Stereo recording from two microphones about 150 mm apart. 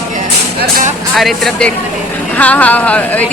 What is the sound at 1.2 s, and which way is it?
Speech, centre (ahead or behind).